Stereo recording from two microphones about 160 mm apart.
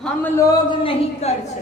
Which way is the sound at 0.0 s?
10° left (ahead or behind).